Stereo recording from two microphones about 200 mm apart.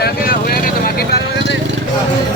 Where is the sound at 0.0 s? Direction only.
50° left (ahead or behind).